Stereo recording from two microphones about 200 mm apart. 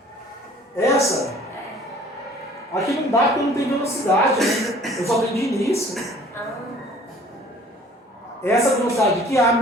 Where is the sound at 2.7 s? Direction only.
15° left (ahead or behind).